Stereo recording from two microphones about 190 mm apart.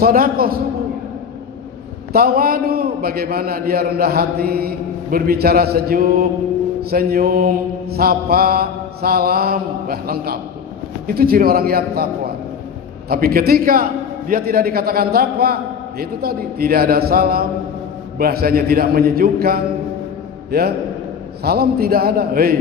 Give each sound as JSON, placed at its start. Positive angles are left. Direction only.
{"t": 0.0, "sound": "mantra", "side_deg": -50}
{"t": 2.1, "sound": "mantra", "side_deg": -50}
{"t": 13.1, "sound": "mantra", "side_deg": -50}
{"t": 20.5, "sound": "a man's voice", "side_deg": -55}
{"t": 21.4, "sound": "mantra", "side_deg": -55}